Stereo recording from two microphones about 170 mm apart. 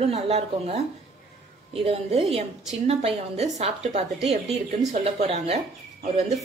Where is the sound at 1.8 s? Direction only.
35° right (ahead or behind).